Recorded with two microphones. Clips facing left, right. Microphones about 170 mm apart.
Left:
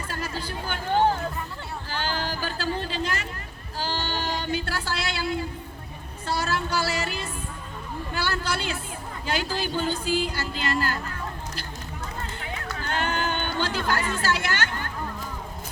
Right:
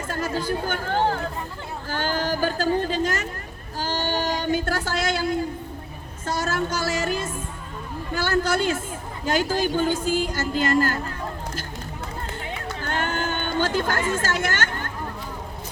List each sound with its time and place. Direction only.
0.1 s speech: 45° right (ahead or behind)
1.9 s speech: 45° right (ahead or behind)
3.8 s a sound: 45° right (ahead or behind)
6.2 s music: 45° right (ahead or behind)
8.1 s speech: 45° right (ahead or behind)
12.8 s a sound: 45° right (ahead or behind)
14.1 s a child's voice: 45° right (ahead or behind)